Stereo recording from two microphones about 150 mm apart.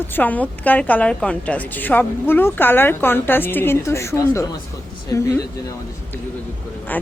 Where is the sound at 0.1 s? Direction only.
10° left (ahead or behind).